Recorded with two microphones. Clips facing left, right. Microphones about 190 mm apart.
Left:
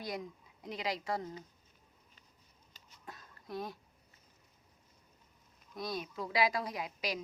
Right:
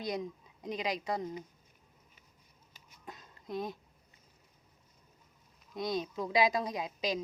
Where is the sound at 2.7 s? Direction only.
20° right (ahead or behind).